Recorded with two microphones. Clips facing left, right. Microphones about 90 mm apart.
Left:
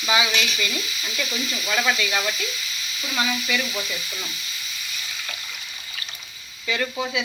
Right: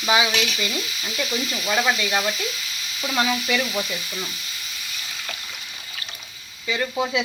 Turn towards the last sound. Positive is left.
turn(degrees=-10)  # may be behind; listen again after turning